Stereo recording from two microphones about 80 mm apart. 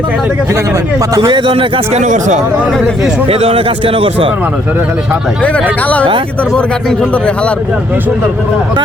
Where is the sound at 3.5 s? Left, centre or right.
Right.